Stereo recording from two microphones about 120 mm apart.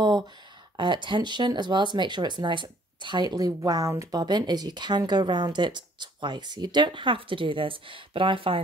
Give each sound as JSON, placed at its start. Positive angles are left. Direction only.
{"t": 0.7, "sound": "speech", "side_deg": -40}